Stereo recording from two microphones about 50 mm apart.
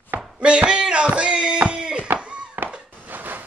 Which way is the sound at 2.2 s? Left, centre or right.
Right.